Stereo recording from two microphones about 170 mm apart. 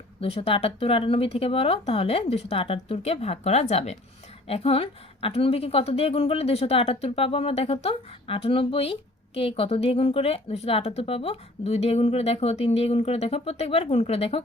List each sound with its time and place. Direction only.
0.2 s a woman's voice: 35° left (ahead or behind)